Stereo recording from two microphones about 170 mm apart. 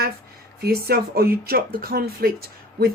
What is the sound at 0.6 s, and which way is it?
Speech, 65° right (ahead or behind).